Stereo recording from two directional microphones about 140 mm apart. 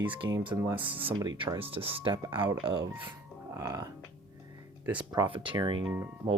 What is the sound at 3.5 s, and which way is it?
Speech, 25° right (ahead or behind).